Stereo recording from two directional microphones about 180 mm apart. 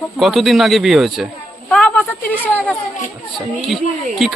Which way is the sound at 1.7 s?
5° left (ahead or behind).